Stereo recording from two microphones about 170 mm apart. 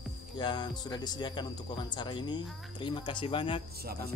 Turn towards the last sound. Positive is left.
turn(degrees=-65)  # may be behind; listen again after turning